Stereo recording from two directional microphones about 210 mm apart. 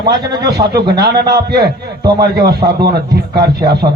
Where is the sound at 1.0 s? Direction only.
50° right (ahead or behind).